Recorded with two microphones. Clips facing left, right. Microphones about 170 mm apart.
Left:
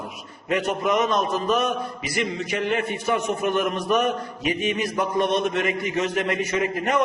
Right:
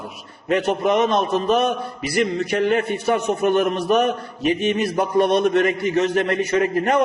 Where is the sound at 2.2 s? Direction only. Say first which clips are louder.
Right 6 dB; 65° right (ahead or behind).